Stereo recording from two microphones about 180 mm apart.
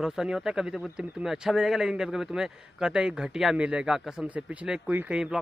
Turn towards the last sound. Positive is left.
turn(degrees=-5)  # may be behind; listen again after turning